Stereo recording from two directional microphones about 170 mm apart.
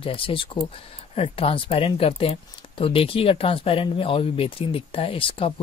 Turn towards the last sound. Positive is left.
turn(degrees=35)  # may be behind; listen again after turning